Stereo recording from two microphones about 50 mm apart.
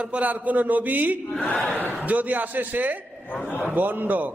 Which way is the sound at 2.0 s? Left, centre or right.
Right.